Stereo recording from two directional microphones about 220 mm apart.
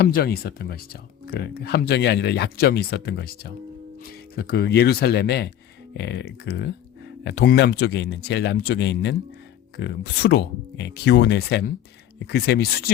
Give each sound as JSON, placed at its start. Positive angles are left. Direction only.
{"t": 0.0, "sound": "speech", "side_deg": 45}